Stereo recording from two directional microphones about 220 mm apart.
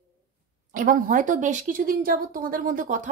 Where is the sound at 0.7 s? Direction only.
40° right (ahead or behind).